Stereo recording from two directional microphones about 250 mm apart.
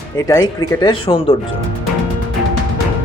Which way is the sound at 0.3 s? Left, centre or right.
Centre.